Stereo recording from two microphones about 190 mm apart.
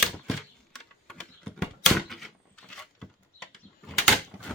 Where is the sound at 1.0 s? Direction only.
5° left (ahead or behind).